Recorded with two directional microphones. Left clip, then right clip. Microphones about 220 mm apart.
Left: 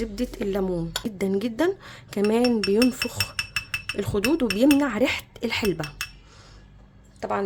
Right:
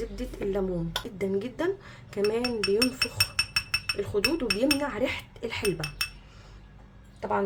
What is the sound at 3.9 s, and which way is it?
Speech, 40° left (ahead or behind).